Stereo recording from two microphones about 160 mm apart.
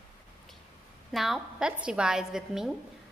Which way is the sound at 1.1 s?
Centre (ahead or behind).